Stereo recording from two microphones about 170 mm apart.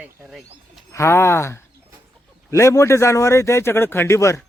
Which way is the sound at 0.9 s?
15° left (ahead or behind).